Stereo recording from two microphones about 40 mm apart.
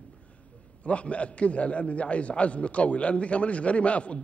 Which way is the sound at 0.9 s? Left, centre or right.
Left.